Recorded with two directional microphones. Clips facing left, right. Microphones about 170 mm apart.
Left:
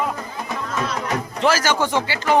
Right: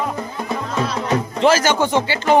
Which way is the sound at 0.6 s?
30° right (ahead or behind).